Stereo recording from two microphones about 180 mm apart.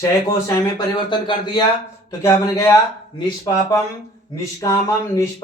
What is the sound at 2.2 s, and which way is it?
Speech, 15° left (ahead or behind).